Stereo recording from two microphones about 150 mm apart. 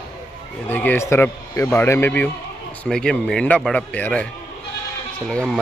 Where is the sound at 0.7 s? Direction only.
10° left (ahead or behind).